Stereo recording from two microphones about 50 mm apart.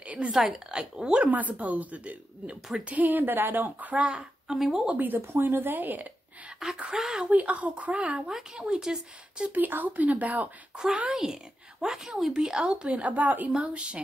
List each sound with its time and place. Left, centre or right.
0.0 s a sound: right
0.3 s speech: centre
1.2 s speech: right
4.0 s speech: right
4.5 s speech: centre
4.8 s speech: right
5.2 s speech: right
6.6 s speech: centre
7.2 s speech: right
9.4 s speech: right
11.1 s speech: centre
13.0 s speech: right
13.6 s speech: right